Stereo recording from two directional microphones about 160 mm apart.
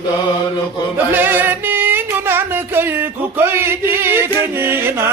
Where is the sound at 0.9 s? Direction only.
10° right (ahead or behind).